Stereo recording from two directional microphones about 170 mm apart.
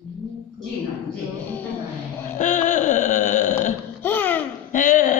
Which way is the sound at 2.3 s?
45° left (ahead or behind).